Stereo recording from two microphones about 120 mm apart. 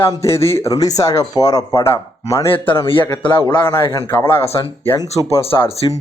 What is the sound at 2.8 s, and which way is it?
Speech, 45° left (ahead or behind).